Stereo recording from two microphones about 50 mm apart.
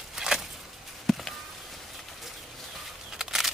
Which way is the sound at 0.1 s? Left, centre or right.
Centre.